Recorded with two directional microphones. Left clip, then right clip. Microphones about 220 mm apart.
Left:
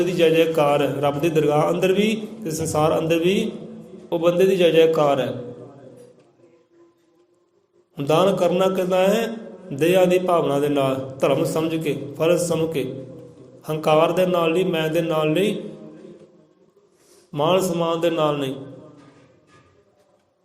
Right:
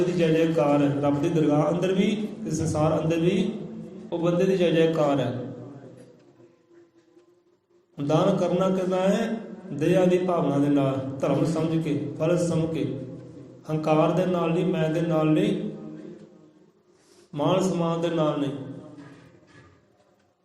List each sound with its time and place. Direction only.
0.2 s a man's voice: 45° left (ahead or behind)
7.9 s a man's voice: 45° left (ahead or behind)
17.3 s a man's voice: 45° left (ahead or behind)